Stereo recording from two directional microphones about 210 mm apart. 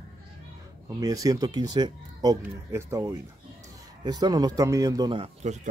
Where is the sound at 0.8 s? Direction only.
15° right (ahead or behind).